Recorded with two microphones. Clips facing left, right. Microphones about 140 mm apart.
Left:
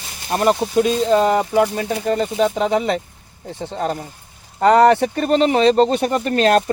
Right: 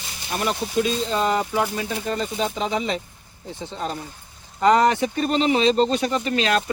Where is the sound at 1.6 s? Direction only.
55° left (ahead or behind).